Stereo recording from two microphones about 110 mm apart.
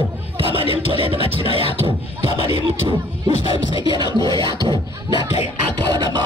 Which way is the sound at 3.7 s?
50° left (ahead or behind).